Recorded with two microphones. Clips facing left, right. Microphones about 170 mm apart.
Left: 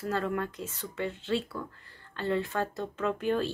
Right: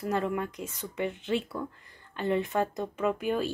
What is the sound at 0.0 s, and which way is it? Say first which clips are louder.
Speech: right 1 dB; 15° right (ahead or behind).